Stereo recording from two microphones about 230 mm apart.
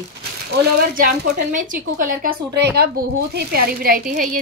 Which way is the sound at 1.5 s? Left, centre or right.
Right.